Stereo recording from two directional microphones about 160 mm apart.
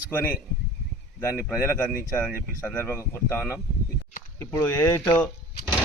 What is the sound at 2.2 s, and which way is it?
A man's voice, 5° left (ahead or behind).